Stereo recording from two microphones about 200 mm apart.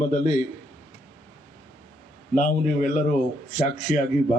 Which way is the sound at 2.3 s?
40° left (ahead or behind).